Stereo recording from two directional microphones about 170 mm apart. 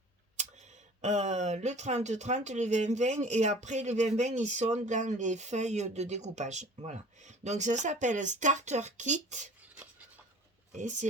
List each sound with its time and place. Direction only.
1.0 s speech: 45° right (ahead or behind)
9.6 s a sound: 10° right (ahead or behind)
10.7 s speech: 45° right (ahead or behind)